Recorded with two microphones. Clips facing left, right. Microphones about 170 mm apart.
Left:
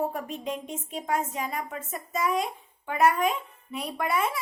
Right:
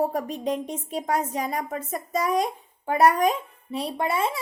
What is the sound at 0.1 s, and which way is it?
A woman's voice, 40° right (ahead or behind).